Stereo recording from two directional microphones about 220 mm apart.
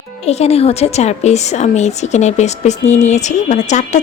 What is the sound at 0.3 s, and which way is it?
A woman's voice, 30° left (ahead or behind).